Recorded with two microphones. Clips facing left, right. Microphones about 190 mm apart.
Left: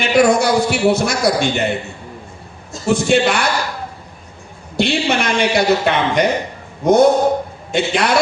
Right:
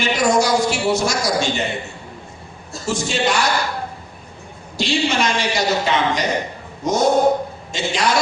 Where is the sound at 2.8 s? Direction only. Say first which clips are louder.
Left 6 dB; 60° left (ahead or behind).